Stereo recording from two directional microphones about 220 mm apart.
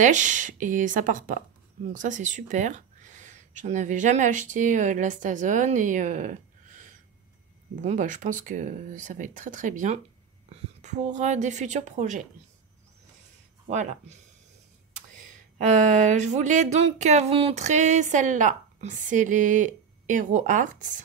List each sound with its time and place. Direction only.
0.0 s speech: 35° right (ahead or behind)
7.8 s speech: 35° right (ahead or behind)
13.7 s speech: 30° right (ahead or behind)
15.3 s speech: 35° right (ahead or behind)